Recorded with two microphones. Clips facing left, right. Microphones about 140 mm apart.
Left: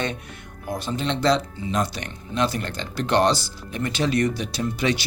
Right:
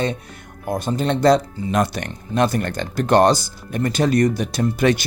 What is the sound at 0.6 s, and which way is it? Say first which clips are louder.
Speech: right 5 dB; 50° right (ahead or behind).